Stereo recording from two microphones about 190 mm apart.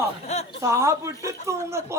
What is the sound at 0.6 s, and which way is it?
Speech, 15° right (ahead or behind).